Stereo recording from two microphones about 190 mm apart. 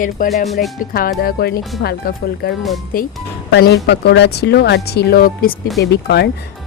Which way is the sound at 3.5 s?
60° left (ahead or behind).